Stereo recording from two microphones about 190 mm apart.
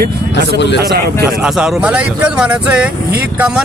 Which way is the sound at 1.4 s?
5° right (ahead or behind).